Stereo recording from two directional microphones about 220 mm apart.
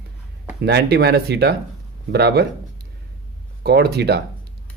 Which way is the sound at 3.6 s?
50° right (ahead or behind).